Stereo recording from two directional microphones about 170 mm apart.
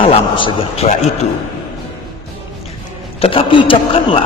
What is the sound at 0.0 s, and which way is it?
Speech, 30° left (ahead or behind).